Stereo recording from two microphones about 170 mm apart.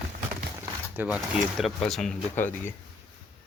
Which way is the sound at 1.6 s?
Centre (ahead or behind).